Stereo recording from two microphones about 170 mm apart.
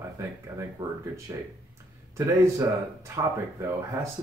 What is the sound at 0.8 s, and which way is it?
Speech, 30° right (ahead or behind).